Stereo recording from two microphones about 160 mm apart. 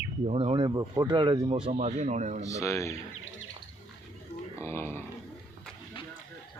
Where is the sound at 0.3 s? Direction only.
40° right (ahead or behind).